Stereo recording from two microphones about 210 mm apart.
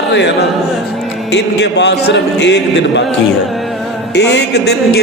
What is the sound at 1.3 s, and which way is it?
A man's voice, 55° left (ahead or behind).